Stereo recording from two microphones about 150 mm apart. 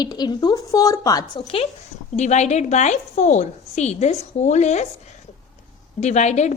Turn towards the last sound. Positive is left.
turn(degrees=50)  # may be behind; listen again after turning